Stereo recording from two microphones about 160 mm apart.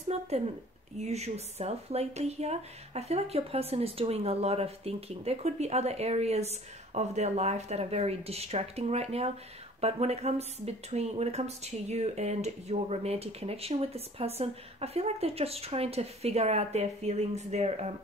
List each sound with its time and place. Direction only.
0.1 s speech: 40° right (ahead or behind)